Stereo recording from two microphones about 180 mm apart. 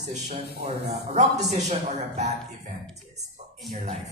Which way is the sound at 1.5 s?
40° right (ahead or behind).